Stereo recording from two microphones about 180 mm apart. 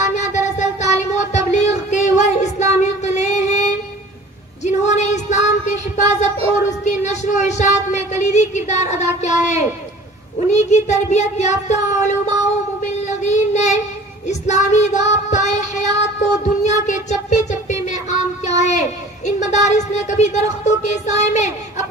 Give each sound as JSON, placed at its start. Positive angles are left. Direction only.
{"t": 0.0, "sound": "child singing", "side_deg": 40}
{"t": 4.6, "sound": "female singing", "side_deg": 40}
{"t": 6.8, "sound": "a sound", "side_deg": 40}
{"t": 10.5, "sound": "speech", "side_deg": 40}
{"t": 12.8, "sound": "child singing", "side_deg": 40}
{"t": 18.6, "sound": "speech", "side_deg": 40}